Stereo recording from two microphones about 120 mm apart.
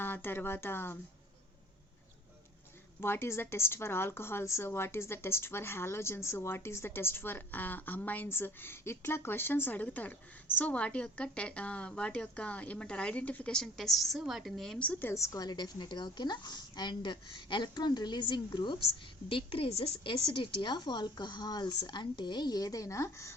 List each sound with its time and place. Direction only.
0.0 s a woman's voice: 20° left (ahead or behind)
3.0 s a woman's voice: 20° left (ahead or behind); by 20.1 s 55° left (ahead or behind)
20.3 s a woman's voice: 40° left (ahead or behind); by 23.3 s 25° left (ahead or behind)